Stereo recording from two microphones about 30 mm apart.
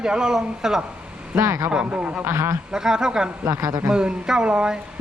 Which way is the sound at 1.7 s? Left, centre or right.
Right.